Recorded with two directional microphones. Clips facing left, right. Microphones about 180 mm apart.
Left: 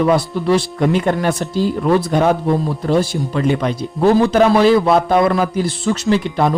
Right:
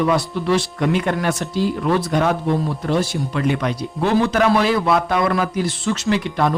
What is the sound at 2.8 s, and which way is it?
Speech, 30° left (ahead or behind).